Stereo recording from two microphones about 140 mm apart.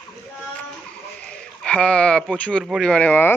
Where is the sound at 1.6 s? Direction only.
5° left (ahead or behind).